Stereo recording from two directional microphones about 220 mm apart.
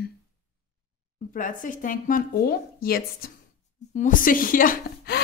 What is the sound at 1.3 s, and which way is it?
Speech, 35° left (ahead or behind).